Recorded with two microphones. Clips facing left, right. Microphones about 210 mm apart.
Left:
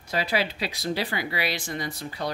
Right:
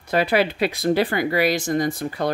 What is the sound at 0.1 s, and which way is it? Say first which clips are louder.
Speech: right 7 dB; 55° right (ahead or behind).